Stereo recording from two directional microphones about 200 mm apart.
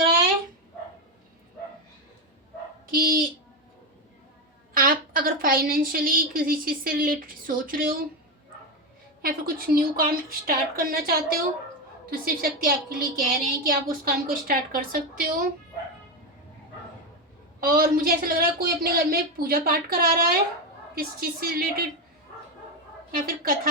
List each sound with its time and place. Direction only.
2.8 s speech: 45° right (ahead or behind)
4.7 s a woman's voice: 45° right (ahead or behind)
9.2 s a woman's voice: 45° right (ahead or behind)
17.6 s a woman's voice: 45° right (ahead or behind)
23.1 s a woman's voice: 45° right (ahead or behind)